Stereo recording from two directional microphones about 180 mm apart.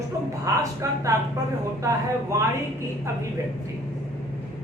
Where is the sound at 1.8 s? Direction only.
15° right (ahead or behind).